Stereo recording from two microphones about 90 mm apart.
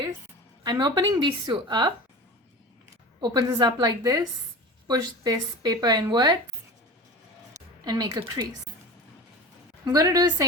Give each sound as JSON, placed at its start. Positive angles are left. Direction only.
{"t": 0.6, "sound": "speech", "side_deg": -45}
{"t": 3.2, "sound": "speech", "side_deg": -50}
{"t": 7.9, "sound": "speech", "side_deg": -45}
{"t": 9.8, "sound": "speech", "side_deg": -45}